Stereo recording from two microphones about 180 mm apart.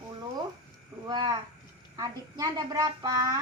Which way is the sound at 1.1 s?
25° right (ahead or behind).